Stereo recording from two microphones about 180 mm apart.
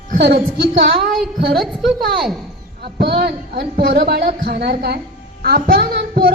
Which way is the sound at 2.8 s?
65° right (ahead or behind).